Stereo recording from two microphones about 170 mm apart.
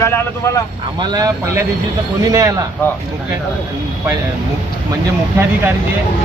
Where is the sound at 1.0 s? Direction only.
25° right (ahead or behind).